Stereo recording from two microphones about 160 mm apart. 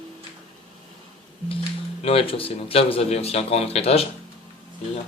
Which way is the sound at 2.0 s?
35° left (ahead or behind).